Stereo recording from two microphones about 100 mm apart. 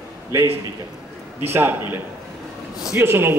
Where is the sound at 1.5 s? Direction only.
20° right (ahead or behind).